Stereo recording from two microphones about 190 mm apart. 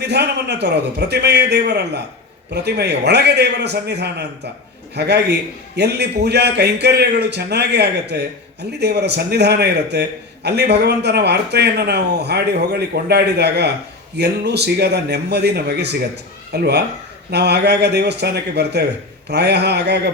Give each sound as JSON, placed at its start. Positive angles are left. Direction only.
{"t": 0.0, "sound": "a man's voice", "side_deg": -60}